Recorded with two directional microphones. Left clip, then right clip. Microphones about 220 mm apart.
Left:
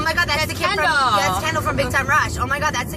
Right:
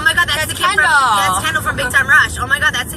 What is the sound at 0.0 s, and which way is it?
Vehicle, 20° left (ahead or behind).